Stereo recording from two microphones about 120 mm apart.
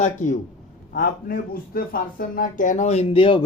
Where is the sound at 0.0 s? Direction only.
90° left.